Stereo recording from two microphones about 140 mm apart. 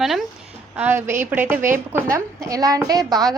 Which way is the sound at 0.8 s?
15° right (ahead or behind).